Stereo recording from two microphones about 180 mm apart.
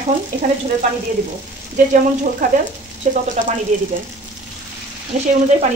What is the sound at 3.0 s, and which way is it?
Speech, 40° right (ahead or behind).